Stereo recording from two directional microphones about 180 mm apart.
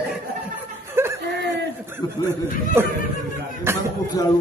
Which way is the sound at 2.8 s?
15° right (ahead or behind).